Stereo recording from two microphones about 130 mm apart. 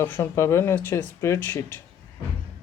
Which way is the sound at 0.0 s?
20° left (ahead or behind).